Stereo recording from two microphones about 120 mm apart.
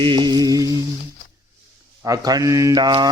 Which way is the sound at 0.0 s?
40° right (ahead or behind).